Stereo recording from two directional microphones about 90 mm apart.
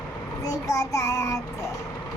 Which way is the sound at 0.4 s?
40° left (ahead or behind).